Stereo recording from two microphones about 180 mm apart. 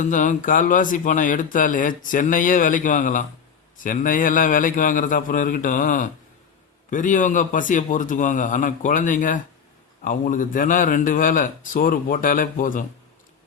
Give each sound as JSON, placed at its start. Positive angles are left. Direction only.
{"t": 0.0, "sound": "a man's voice", "side_deg": 45}